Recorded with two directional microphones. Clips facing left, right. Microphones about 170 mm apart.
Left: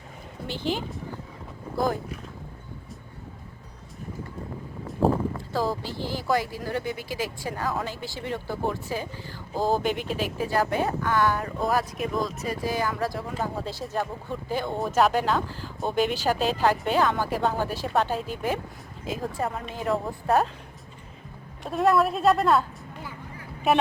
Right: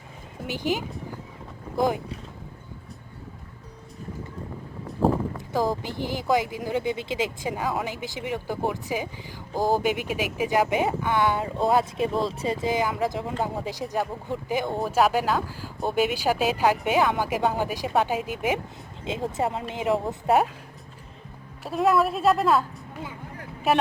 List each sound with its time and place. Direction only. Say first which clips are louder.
0.4 s speech: right 2 dB; 10° right (ahead or behind)
5.5 s speech: right 4 dB; 15° right (ahead or behind)
21.6 s a woman's voice: even; centre (ahead or behind)
23.7 s a woman's voice: even; centre (ahead or behind)